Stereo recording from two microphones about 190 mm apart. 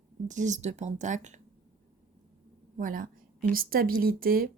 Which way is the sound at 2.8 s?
45° right (ahead or behind).